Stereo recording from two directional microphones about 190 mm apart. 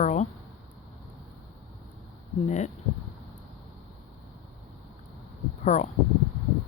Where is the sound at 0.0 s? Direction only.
40° left (ahead or behind).